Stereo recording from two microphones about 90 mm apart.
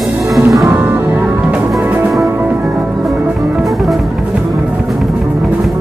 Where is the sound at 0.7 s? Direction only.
20° right (ahead or behind).